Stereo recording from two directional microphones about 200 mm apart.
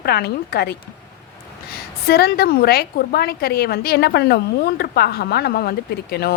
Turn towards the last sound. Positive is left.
turn(degrees=50)  # may be behind; listen again after turning